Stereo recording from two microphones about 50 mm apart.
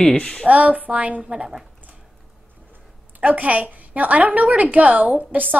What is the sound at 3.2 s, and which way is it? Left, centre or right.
A woman's voice, right.